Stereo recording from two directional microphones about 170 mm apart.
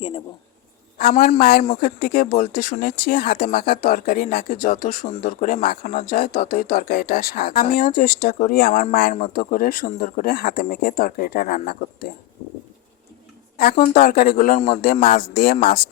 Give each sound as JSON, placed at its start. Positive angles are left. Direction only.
{"t": 0.9, "sound": "speech", "side_deg": 60}
{"t": 1.6, "sound": "speech", "side_deg": 55}
{"t": 13.6, "sound": "speech", "side_deg": 65}